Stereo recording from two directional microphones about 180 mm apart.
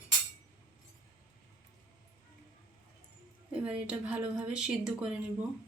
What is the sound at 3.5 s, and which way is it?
A woman's voice, 5° right (ahead or behind).